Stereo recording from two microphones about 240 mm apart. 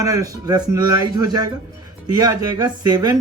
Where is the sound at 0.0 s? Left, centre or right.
Centre.